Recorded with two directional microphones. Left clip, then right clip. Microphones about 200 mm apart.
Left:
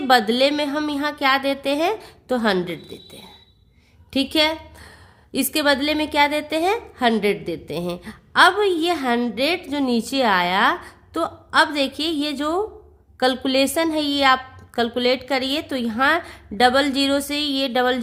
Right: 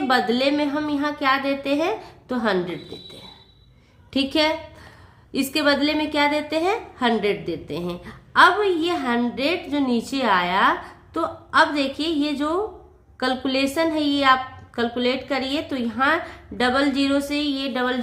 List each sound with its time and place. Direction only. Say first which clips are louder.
0.1 s a woman's voice: left 4 dB; 40° left (ahead or behind)
4.1 s a woman's voice: left 1 dB; 40° left (ahead or behind)